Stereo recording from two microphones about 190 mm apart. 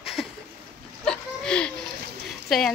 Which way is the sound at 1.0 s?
5° left (ahead or behind).